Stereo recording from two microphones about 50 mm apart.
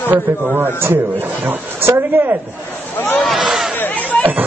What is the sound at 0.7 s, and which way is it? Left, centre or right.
A woman's voice, right.